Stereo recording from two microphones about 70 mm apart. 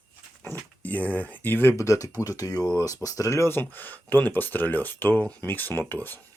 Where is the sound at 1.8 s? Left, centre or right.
Left.